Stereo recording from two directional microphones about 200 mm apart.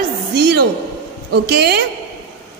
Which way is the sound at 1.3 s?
55° right (ahead or behind).